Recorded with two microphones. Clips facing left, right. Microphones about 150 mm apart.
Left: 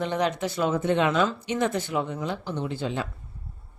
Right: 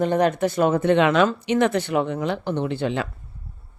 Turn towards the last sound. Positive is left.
turn(degrees=-70)  # may be behind; listen again after turning